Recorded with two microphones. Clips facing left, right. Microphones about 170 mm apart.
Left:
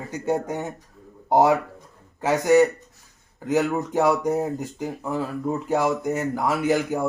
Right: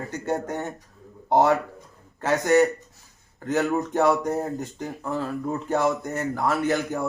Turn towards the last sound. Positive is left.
turn(degrees=10)  # may be behind; listen again after turning